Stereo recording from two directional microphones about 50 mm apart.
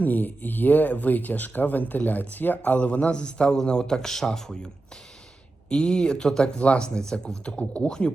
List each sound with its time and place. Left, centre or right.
0.0 s speech: left; by 7.5 s centre
7.5 s speech: left